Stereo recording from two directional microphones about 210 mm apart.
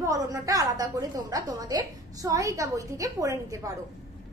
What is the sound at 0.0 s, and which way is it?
A woman's voice, 15° right (ahead or behind).